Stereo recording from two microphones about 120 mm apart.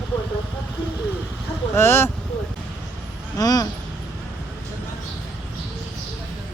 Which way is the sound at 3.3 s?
30° left (ahead or behind).